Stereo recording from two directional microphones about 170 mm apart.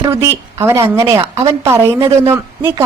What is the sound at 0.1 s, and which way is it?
A woman's voice, 15° right (ahead or behind).